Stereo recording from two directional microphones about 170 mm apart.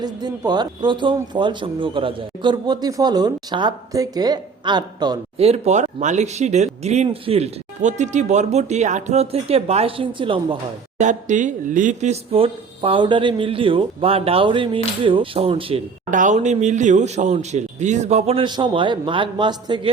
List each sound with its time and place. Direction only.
0.0 s a man's voice: 25° right (ahead or behind)
5.4 s speech: 40° right (ahead or behind)
11.0 s speech: 45° right (ahead or behind)
16.0 s speech: 50° right (ahead or behind); by 19.9 s 25° right (ahead or behind)